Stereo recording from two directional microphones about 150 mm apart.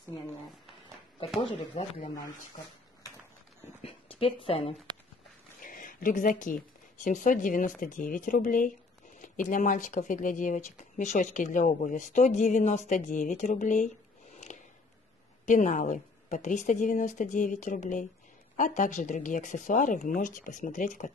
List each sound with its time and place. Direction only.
1.8 s speech: 45° left (ahead or behind)
3.8 s a sound: 35° left (ahead or behind)
5.6 s speech: 65° left (ahead or behind)
15.4 s speech: 55° left (ahead or behind)